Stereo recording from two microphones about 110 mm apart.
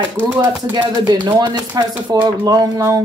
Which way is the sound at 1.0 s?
40° right (ahead or behind).